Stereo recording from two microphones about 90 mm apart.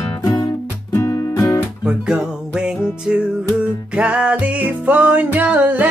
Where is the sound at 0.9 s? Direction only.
35° left (ahead or behind).